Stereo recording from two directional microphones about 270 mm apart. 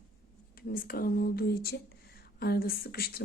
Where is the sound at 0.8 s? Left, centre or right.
Left.